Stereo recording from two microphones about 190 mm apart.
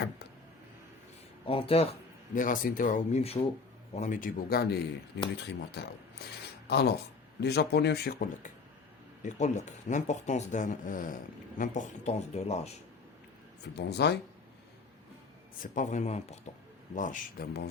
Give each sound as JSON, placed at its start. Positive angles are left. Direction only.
{"t": 1.5, "sound": "speech", "side_deg": 30}
{"t": 2.3, "sound": "speech", "side_deg": 45}
{"t": 9.2, "sound": "speech", "side_deg": 40}
{"t": 13.7, "sound": "speech", "side_deg": 60}
{"t": 15.6, "sound": "speech", "side_deg": 40}